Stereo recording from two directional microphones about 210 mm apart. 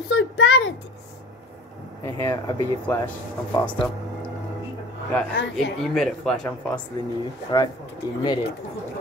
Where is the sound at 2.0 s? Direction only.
10° left (ahead or behind).